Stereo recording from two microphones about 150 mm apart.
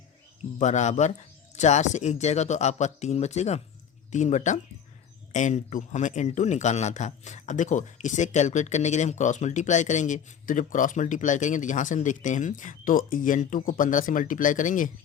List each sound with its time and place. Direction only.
0.6 s a man's voice: 50° left (ahead or behind)